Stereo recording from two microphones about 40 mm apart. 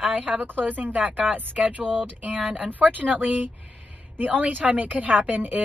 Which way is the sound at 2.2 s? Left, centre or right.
Right.